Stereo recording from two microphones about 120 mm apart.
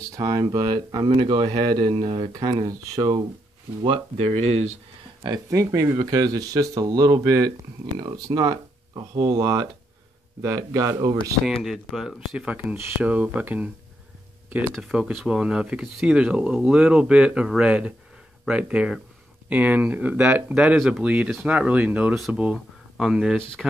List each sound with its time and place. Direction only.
0.0 s speech: 30° right (ahead or behind)
3.8 s speech: 50° right (ahead or behind)
5.5 s speech: 25° right (ahead or behind)
11.4 s speech: centre (ahead or behind)
12.4 s speech: 15° right (ahead or behind)
14.7 s speech: 5° right (ahead or behind)